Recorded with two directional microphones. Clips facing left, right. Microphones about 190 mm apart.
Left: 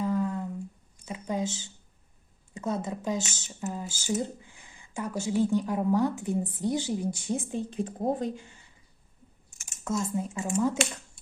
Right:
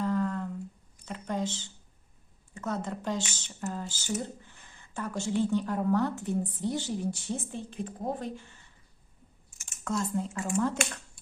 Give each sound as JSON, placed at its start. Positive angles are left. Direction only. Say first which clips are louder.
{"t": 0.0, "sound": "a sound", "louder": "left 1 dB", "side_deg": 10}
{"t": 1.0, "sound": "a woman's voice", "louder": "left 2 dB", "side_deg": 10}
{"t": 7.8, "sound": "a woman's voice", "louder": "left 5 dB", "side_deg": 30}
{"t": 8.2, "sound": "speech", "louder": "left 5 dB", "side_deg": 15}
{"t": 10.0, "sound": "a woman's voice", "louder": "left 1 dB", "side_deg": 10}